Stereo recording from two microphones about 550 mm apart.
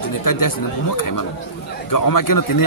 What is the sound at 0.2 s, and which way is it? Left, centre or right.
Speech, left.